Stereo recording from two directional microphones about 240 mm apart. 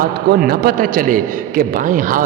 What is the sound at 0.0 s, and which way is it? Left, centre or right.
A man's voice, right.